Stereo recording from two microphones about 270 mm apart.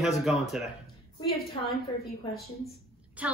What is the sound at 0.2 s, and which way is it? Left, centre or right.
Speech, centre.